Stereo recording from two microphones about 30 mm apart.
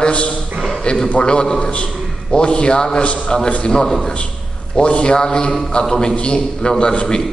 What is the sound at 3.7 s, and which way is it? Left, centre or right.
Speech, left.